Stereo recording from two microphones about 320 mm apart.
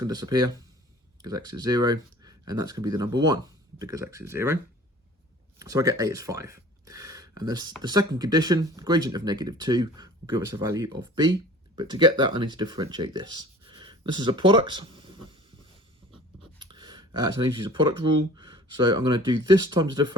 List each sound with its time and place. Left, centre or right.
0.0 s speech: centre
5.5 s speech: centre
16.4 s a sound: centre
18.3 s speech: centre